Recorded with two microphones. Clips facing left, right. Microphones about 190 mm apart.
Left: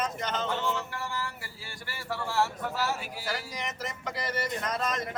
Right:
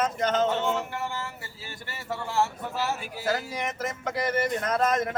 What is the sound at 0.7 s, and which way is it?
Speech, 25° right (ahead or behind).